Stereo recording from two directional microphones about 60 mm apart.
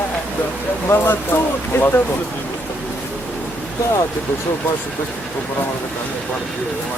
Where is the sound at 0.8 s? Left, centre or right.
Left.